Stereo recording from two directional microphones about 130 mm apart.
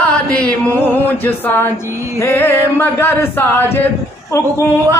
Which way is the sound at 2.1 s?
20° left (ahead or behind).